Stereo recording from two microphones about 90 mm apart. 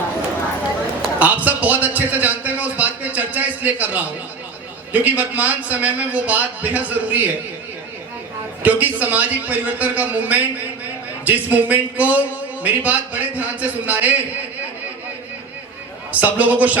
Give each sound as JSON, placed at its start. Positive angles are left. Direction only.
{"t": 1.2, "sound": "a sound", "side_deg": -15}
{"t": 4.9, "sound": "a man's voice", "side_deg": -15}
{"t": 8.6, "sound": "a man's voice", "side_deg": -15}
{"t": 16.2, "sound": "a man's voice", "side_deg": -15}